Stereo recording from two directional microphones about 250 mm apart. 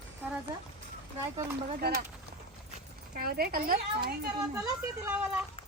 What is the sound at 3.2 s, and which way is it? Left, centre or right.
Speech, right.